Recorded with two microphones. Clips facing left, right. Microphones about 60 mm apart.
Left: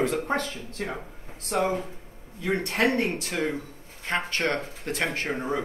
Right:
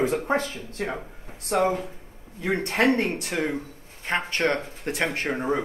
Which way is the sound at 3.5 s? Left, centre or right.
Right.